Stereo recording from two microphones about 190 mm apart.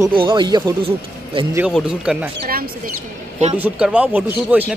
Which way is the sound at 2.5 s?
50° right (ahead or behind).